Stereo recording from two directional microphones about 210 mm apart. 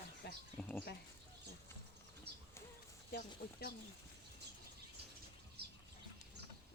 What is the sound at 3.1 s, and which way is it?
Speech, 45° left (ahead or behind).